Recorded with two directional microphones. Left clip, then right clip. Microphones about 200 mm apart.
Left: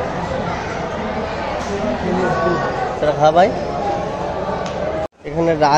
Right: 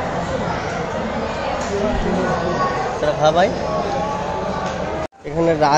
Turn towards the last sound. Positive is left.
turn(degrees=0)  # may be behind; listen again after turning